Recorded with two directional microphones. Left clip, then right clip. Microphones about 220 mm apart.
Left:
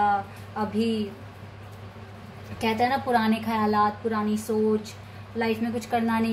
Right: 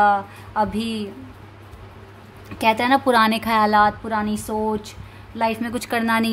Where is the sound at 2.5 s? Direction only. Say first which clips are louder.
Right 7 dB; 45° right (ahead or behind).